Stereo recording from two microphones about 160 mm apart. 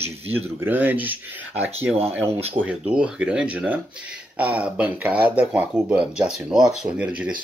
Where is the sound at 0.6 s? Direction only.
10° right (ahead or behind).